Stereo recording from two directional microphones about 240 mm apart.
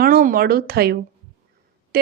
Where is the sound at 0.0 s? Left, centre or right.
Right.